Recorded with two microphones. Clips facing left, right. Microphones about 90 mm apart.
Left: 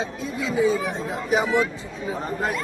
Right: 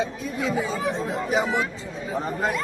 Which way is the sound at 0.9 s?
15° left (ahead or behind).